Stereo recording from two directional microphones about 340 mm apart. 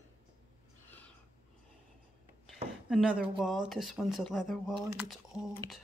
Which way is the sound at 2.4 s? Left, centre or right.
Centre.